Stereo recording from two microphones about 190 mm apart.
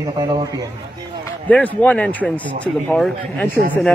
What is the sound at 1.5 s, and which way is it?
Speech, 10° left (ahead or behind).